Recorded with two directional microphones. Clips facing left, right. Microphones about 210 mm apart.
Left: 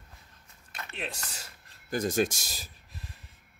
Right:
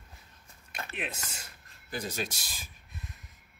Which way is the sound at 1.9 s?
50° left (ahead or behind).